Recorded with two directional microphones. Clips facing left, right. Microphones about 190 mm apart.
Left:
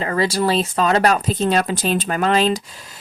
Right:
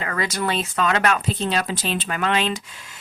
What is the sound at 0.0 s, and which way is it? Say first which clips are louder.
Speech: left 6 dB; 30° left (ahead or behind).